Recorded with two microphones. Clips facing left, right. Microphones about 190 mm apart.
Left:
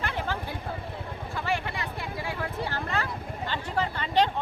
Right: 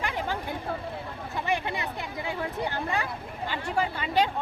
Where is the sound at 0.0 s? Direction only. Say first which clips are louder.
Right 1 dB; 15° right (ahead or behind).